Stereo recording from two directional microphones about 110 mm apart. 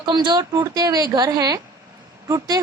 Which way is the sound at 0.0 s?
40° right (ahead or behind).